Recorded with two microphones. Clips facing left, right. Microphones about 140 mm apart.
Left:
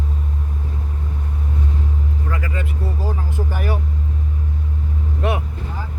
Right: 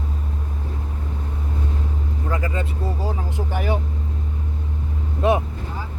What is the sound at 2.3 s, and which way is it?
Vehicle, 25° right (ahead or behind).